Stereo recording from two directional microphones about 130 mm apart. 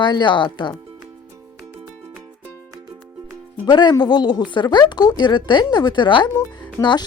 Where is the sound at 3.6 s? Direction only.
35° left (ahead or behind).